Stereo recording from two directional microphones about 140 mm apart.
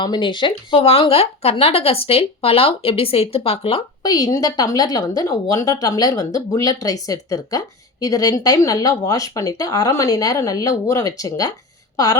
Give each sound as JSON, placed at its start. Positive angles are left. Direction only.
{"t": 0.0, "sound": "speech", "side_deg": 35}
{"t": 4.0, "sound": "a woman's voice", "side_deg": 25}